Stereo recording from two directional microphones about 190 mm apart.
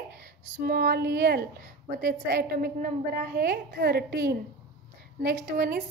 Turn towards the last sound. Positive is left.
turn(degrees=-50)  # may be behind; listen again after turning